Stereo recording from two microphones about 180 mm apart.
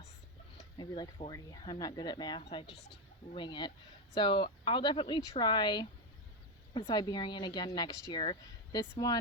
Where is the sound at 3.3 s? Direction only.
25° left (ahead or behind).